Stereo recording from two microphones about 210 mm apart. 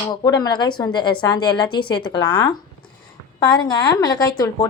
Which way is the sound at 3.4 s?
20° left (ahead or behind).